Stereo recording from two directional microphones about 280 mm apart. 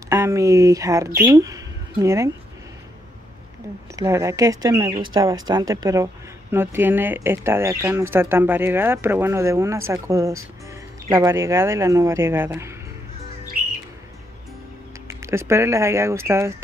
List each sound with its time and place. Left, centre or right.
0.1 s speech: centre
3.9 s speech: centre
15.0 s speech: centre